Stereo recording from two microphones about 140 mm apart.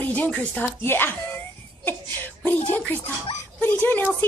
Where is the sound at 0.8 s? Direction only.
15° left (ahead or behind).